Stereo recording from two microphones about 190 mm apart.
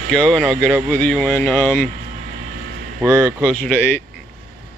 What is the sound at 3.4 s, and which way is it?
Speech, 5° left (ahead or behind).